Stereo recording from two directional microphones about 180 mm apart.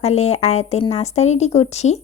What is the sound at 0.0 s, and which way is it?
A woman's voice, 40° left (ahead or behind).